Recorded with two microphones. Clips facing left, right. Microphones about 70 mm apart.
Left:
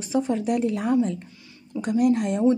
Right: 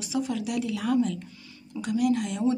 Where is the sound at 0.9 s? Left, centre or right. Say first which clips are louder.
Left 1 dB; left.